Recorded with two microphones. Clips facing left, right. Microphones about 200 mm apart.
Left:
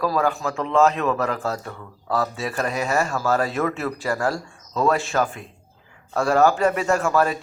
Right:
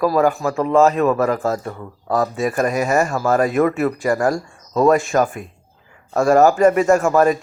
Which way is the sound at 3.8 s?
15° right (ahead or behind).